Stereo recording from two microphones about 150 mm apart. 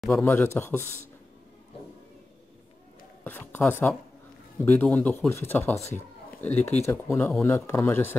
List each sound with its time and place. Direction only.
0.1 s speech: 15° left (ahead or behind)
3.3 s speech: 10° left (ahead or behind)